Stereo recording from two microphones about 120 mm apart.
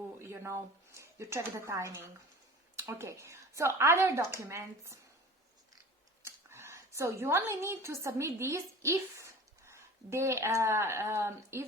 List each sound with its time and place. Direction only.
0.2 s speech: 20° right (ahead or behind)
6.2 s a woman's voice: 20° right (ahead or behind)